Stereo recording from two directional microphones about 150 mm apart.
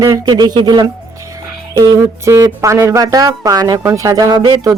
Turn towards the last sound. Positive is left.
turn(degrees=-25)  # may be behind; listen again after turning